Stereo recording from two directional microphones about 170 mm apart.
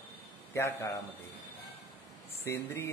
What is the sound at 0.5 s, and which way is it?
Speech, 15° left (ahead or behind).